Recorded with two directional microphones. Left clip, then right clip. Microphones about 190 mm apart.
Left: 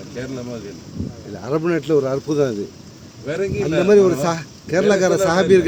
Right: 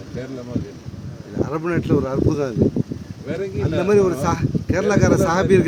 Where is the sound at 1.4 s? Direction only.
20° left (ahead or behind).